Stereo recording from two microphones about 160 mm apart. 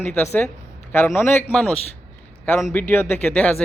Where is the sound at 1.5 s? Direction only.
10° left (ahead or behind).